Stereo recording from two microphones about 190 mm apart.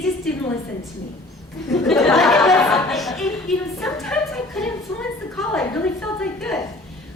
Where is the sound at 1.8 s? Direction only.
Centre (ahead or behind).